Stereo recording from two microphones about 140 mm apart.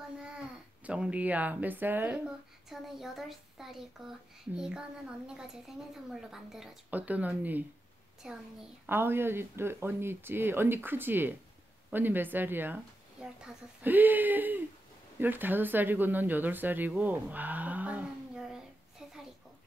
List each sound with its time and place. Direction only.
0.8 s speech: 10° right (ahead or behind)
2.7 s a woman's voice: centre (ahead or behind)